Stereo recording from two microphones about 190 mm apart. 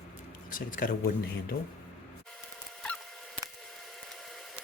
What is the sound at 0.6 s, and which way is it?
Speech, 45° left (ahead or behind).